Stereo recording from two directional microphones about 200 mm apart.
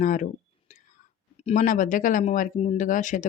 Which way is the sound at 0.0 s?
40° left (ahead or behind).